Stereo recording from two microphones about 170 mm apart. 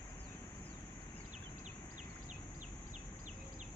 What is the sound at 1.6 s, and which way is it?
Bird, 45° right (ahead or behind).